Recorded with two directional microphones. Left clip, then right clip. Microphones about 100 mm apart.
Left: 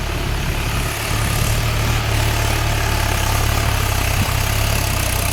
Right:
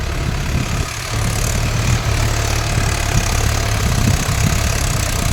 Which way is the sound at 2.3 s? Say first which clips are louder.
Even; 30° right (ahead or behind).